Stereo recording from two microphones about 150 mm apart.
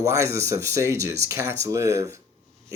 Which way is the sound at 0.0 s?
20° right (ahead or behind).